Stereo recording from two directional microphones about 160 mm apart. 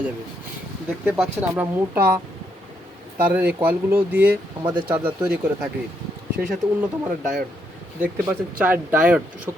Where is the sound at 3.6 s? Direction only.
10° right (ahead or behind).